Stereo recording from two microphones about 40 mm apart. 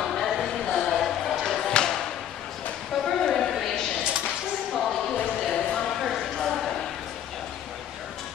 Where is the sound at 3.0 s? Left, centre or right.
Centre.